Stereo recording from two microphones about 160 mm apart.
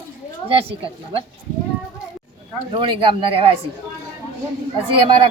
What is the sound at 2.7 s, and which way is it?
Speech, 30° right (ahead or behind).